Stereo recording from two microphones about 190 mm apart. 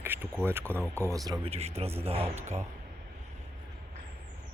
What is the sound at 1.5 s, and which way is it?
Speech, 35° right (ahead or behind).